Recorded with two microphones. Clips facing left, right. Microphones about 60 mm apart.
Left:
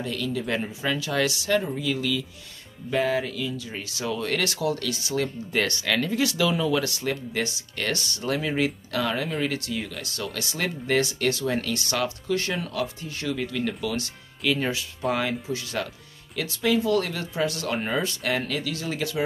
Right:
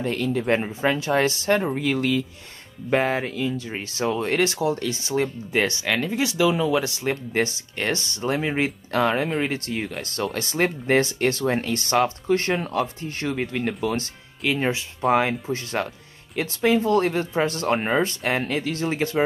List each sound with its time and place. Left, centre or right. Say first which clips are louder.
0.0 s speech: right 5 dB; right